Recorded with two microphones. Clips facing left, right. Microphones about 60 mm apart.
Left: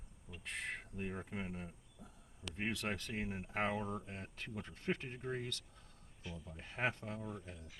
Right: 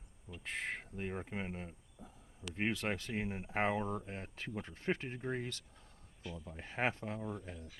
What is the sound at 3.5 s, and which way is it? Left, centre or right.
Speech, right.